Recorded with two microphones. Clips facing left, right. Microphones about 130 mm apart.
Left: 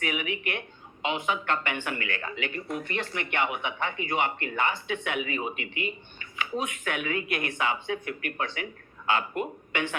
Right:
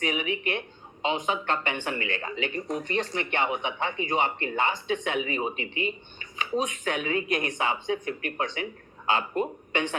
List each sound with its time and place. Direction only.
0.0 s speech: 25° right (ahead or behind)
2.5 s speech: 40° right (ahead or behind)